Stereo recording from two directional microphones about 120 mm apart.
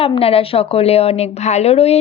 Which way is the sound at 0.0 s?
55° left (ahead or behind).